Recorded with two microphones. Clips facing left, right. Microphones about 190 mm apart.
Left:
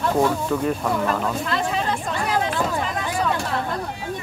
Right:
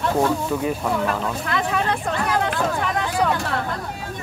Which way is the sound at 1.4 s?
60° right (ahead or behind).